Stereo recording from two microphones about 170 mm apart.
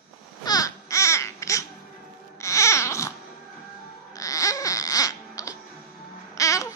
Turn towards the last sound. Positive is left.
turn(degrees=20)  # may be behind; listen again after turning